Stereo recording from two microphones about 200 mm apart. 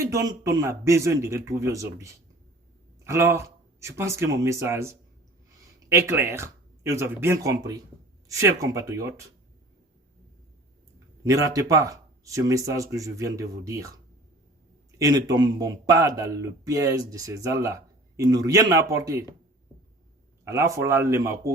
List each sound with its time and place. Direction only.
0.0 s speech: 15° right (ahead or behind)
11.2 s speech: 15° right (ahead or behind)
20.4 s speech: 15° right (ahead or behind)